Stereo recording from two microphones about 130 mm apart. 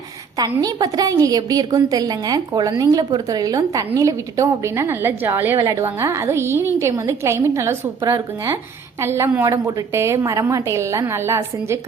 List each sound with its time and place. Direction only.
0.3 s a woman's voice: 30° right (ahead or behind)